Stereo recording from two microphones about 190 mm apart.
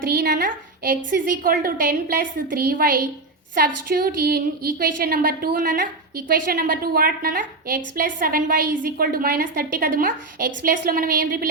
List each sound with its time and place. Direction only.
0.0 s a woman's voice: 50° right (ahead or behind)